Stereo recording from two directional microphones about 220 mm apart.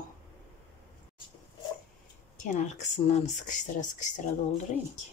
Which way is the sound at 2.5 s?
30° left (ahead or behind).